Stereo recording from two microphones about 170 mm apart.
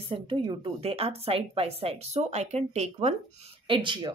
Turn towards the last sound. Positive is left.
turn(degrees=-30)  # may be behind; listen again after turning